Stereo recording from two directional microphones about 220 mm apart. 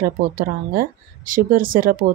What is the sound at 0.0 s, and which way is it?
Speech, 40° right (ahead or behind).